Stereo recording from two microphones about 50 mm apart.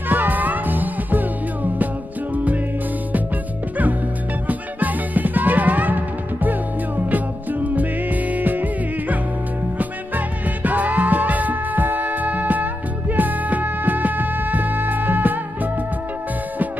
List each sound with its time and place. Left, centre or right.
0.1 s music: right
4.5 s music: right
9.8 s music: right